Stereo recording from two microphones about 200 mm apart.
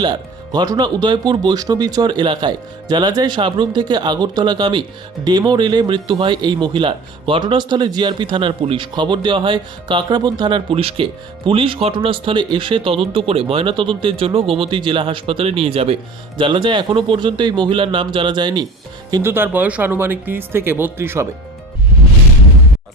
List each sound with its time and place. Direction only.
0.0 s speech: 20° right (ahead or behind)
19.1 s speech: 10° right (ahead or behind)